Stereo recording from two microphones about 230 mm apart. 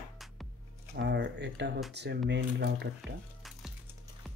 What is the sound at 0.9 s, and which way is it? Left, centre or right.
Speech, right.